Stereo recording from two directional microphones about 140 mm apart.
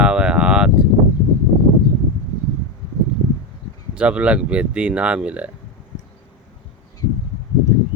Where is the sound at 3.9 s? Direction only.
10° right (ahead or behind).